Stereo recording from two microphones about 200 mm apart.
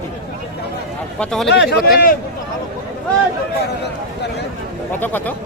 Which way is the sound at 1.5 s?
55° left (ahead or behind).